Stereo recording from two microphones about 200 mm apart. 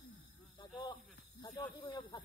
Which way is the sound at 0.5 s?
20° left (ahead or behind).